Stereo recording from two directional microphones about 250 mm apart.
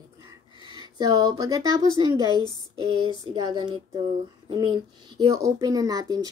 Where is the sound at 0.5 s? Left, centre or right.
Centre.